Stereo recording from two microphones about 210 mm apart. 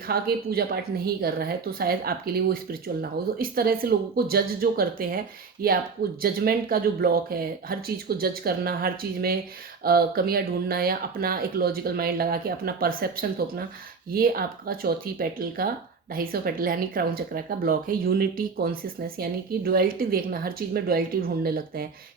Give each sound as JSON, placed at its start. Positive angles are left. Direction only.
{"t": 0.1, "sound": "speech", "side_deg": -45}